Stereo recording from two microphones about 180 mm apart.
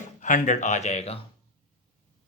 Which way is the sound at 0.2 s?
45° left (ahead or behind).